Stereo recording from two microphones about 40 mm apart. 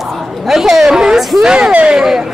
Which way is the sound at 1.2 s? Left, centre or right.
Centre.